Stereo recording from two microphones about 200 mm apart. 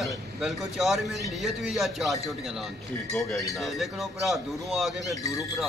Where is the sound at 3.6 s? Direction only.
Centre (ahead or behind).